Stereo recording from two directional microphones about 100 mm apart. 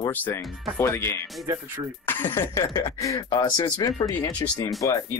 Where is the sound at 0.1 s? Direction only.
20° left (ahead or behind); by 3.8 s 50° left (ahead or behind).